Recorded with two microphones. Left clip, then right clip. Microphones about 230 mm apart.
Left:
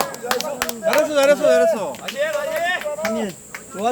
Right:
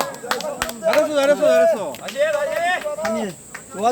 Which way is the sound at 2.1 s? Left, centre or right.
Centre.